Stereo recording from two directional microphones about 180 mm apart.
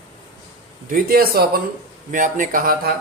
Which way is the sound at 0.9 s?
55° right (ahead or behind).